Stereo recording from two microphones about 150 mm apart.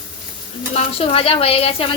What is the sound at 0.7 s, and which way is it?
A woman's voice, 40° left (ahead or behind).